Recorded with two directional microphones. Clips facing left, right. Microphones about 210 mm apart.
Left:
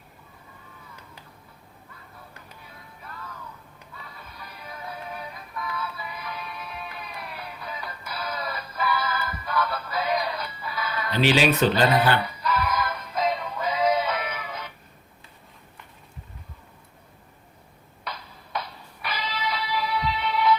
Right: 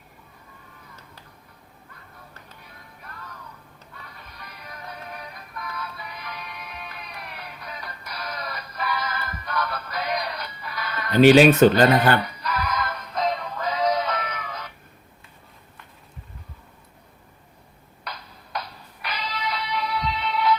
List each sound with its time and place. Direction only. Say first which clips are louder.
4.7 s music: left 2 dB; 5° left (ahead or behind)
11.1 s speech: right 8 dB; 50° right (ahead or behind)
12.2 s music: left 2 dB; centre (ahead or behind)
18.0 s music: left 1 dB; centre (ahead or behind)